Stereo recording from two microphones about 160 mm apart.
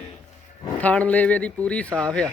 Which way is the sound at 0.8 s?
10° left (ahead or behind).